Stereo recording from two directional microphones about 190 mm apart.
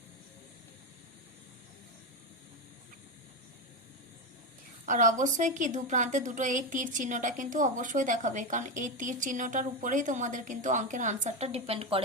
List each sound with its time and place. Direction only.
4.9 s a woman's voice: 40° right (ahead or behind)